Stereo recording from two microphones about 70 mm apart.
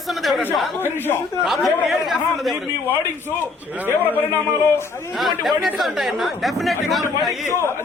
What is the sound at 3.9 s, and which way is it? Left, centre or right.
Speech, left.